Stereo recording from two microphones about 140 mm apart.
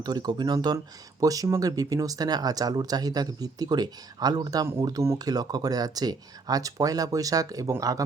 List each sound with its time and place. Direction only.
0.0 s speech: 30° right (ahead or behind)